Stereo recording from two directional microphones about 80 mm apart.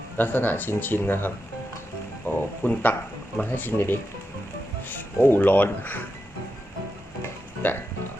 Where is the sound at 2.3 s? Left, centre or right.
Left.